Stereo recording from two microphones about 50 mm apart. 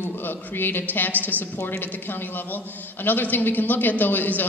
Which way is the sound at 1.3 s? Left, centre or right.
Left.